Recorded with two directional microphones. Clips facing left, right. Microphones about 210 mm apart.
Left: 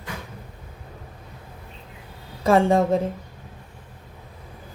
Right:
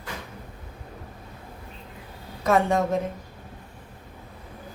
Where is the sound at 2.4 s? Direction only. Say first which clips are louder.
Left 4 dB; 30° left (ahead or behind).